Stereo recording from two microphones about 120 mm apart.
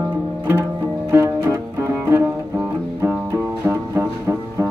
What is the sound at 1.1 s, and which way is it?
Music, 20° right (ahead or behind).